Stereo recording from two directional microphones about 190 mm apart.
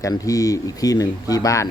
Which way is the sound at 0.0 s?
20° left (ahead or behind).